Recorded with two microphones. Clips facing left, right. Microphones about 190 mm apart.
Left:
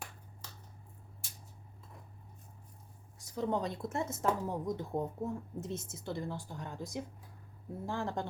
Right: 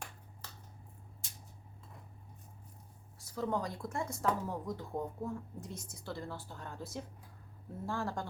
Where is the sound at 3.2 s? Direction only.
20° left (ahead or behind).